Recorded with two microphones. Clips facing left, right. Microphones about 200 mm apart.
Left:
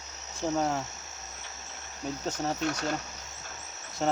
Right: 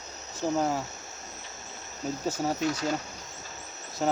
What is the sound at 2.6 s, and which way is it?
Speech, 60° left (ahead or behind).